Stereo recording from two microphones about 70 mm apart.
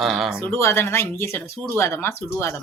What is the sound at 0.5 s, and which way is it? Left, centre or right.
Speech, left.